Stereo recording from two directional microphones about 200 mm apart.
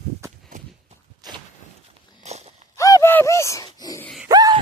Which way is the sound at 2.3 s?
35° right (ahead or behind).